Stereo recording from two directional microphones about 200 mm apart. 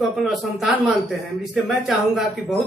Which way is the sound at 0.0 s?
Centre (ahead or behind).